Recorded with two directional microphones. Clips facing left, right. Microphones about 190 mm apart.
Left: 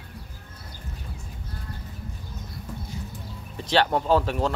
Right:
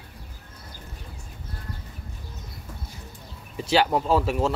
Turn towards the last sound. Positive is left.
turn(degrees=-5)  # may be behind; listen again after turning